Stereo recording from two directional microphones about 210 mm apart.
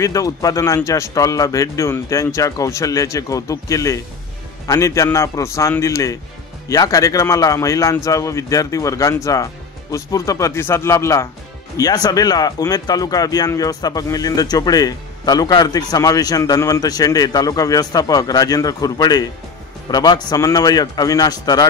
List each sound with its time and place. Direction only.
0.0 s speech: 15° left (ahead or behind)